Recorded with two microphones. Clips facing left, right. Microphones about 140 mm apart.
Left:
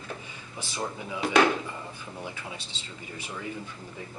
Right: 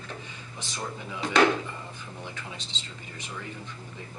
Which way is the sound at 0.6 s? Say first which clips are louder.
Left 2 dB; 15° left (ahead or behind).